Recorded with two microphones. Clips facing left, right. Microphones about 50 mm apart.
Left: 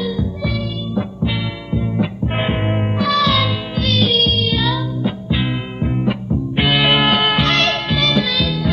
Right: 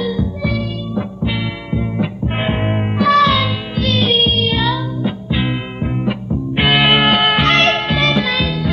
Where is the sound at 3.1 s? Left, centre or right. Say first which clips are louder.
Right 5 dB; right.